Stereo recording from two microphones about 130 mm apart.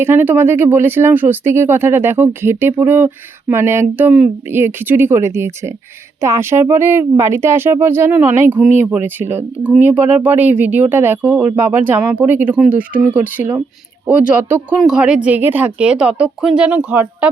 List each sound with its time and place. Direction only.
0.0 s speech: 15° right (ahead or behind)